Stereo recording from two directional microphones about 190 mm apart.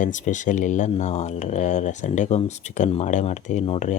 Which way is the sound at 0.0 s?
40° left (ahead or behind).